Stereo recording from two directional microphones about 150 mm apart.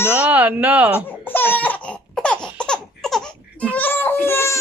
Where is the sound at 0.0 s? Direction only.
10° right (ahead or behind).